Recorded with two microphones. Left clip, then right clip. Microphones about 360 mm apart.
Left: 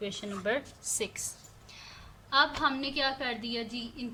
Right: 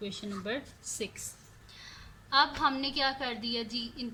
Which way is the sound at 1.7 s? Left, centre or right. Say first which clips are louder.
Even; centre.